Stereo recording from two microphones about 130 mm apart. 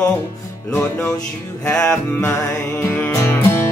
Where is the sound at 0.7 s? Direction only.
5° left (ahead or behind).